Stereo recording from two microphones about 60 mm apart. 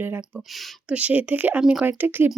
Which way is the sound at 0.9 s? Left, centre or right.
Right.